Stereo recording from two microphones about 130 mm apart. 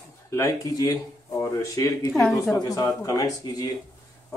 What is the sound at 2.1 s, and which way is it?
Speech, centre (ahead or behind).